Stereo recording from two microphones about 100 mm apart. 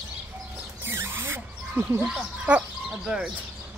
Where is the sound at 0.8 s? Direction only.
25° right (ahead or behind).